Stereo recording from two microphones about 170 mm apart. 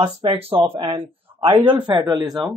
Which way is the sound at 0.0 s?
30° right (ahead or behind).